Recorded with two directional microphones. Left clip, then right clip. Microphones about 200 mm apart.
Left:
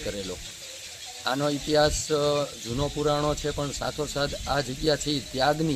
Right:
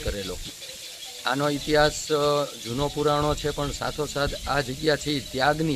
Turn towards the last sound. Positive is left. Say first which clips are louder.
# right 1 dB
turn(degrees=0)  # may be behind; listen again after turning